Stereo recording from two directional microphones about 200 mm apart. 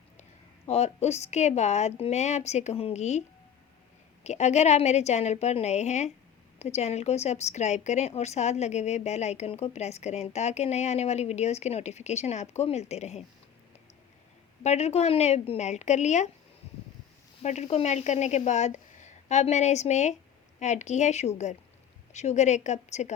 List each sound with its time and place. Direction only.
0.7 s a woman's voice: 35° left (ahead or behind)
14.6 s a woman's voice: 35° left (ahead or behind)
17.4 s a woman's voice: 35° left (ahead or behind)